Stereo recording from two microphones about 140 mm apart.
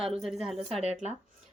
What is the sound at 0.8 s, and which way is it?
Speech, 50° right (ahead or behind).